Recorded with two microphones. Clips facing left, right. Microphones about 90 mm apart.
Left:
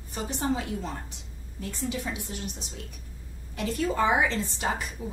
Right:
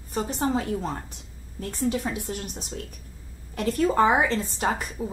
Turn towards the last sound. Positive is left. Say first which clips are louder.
# right 4 dB
turn(degrees=-40)  # may be behind; listen again after turning